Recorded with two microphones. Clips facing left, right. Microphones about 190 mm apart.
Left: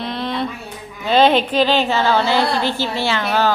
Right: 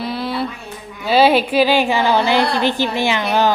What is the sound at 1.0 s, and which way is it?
A woman's voice, 5° right (ahead or behind).